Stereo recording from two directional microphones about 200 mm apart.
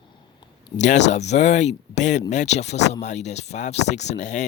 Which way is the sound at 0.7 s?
35° left (ahead or behind).